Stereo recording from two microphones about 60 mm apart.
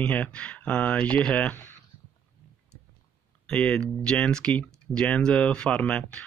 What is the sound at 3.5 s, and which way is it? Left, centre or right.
Speech, centre.